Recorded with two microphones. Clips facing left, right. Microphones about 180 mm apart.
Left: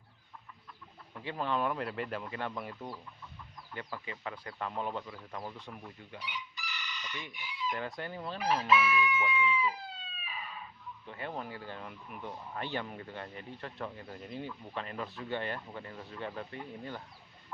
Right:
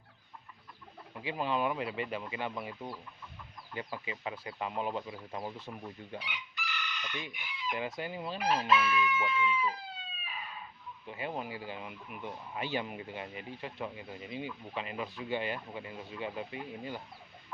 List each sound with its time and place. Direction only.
1.1 s speech: 5° right (ahead or behind)
3.8 s speech: 15° right (ahead or behind)
5.3 s speech: 25° right (ahead or behind)
6.1 s chicken: 65° right (ahead or behind)
7.7 s speech: 5° right (ahead or behind)
8.6 s speech: 5° left (ahead or behind)
11.0 s speech: 10° right (ahead or behind)